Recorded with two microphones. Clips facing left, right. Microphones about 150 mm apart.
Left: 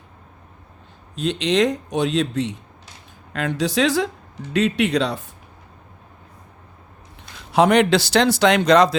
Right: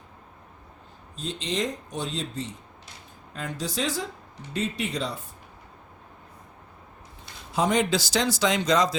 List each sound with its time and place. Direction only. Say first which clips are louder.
1.1 s a man's voice: left 10 dB; 70° left (ahead or behind)
7.3 s a man's voice: left 8 dB; 70° left (ahead or behind)